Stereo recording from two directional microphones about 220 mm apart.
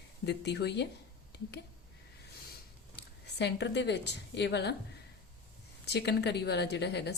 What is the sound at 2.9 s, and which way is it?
A woman's voice, 50° left (ahead or behind).